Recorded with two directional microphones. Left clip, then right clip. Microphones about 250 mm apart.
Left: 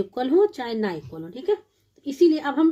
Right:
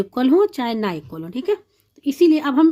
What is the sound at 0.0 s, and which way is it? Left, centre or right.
A woman's voice, right.